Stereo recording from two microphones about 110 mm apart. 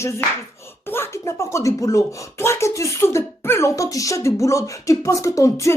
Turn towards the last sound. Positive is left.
turn(degrees=30)  # may be behind; listen again after turning